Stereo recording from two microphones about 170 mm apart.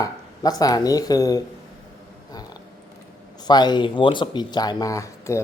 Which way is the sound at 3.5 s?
25° left (ahead or behind).